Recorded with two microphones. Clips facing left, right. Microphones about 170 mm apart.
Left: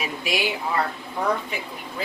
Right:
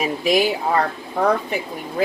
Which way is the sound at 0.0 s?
40° right (ahead or behind).